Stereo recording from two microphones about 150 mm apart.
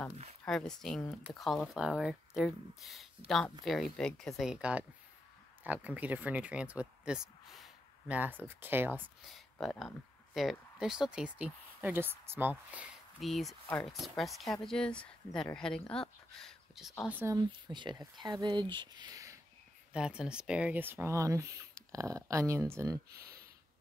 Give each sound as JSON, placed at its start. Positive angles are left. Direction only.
{"t": 0.5, "sound": "speech", "side_deg": 5}
{"t": 8.2, "sound": "speech", "side_deg": -15}
{"t": 9.3, "sound": "speech", "side_deg": 0}
{"t": 13.2, "sound": "speech", "side_deg": 0}
{"t": 17.1, "sound": "speech", "side_deg": -15}
{"t": 17.4, "sound": "speech", "side_deg": -30}
{"t": 19.9, "sound": "speech", "side_deg": -5}
{"t": 23.1, "sound": "a sound", "side_deg": -90}